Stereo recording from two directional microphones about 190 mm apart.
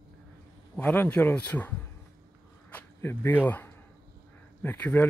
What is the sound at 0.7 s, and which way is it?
Speech, 10° left (ahead or behind).